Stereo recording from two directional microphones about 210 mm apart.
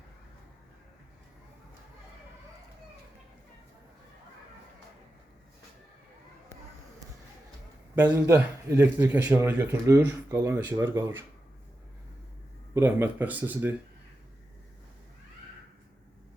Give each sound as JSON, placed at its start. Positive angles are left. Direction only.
{"t": 7.9, "sound": "speech", "side_deg": -10}
{"t": 12.7, "sound": "speech", "side_deg": -10}